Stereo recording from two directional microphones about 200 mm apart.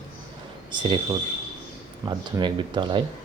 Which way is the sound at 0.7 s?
25° right (ahead or behind).